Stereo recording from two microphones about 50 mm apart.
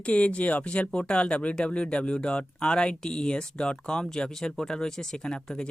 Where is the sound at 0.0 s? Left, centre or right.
Left.